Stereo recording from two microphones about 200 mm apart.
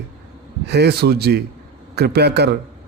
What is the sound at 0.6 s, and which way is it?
A man's voice, 55° right (ahead or behind).